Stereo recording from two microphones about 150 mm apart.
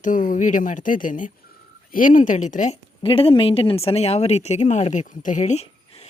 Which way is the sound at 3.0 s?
35° left (ahead or behind).